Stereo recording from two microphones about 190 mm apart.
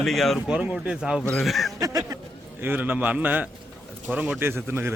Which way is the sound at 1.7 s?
20° right (ahead or behind).